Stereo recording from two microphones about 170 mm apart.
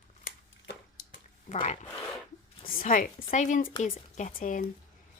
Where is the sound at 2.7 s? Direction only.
55° left (ahead or behind).